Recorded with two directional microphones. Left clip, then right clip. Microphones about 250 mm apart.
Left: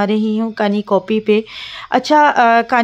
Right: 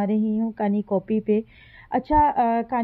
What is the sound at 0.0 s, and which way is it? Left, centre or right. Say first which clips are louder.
Speech: left 8 dB; centre.